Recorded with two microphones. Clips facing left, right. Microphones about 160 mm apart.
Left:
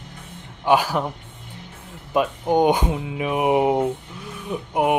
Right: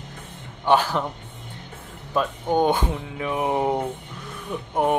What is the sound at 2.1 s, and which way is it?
Speech, 15° left (ahead or behind).